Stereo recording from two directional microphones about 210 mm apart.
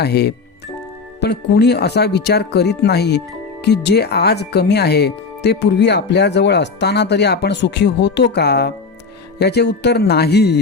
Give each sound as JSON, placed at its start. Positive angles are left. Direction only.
{"t": 0.0, "sound": "speech", "side_deg": 50}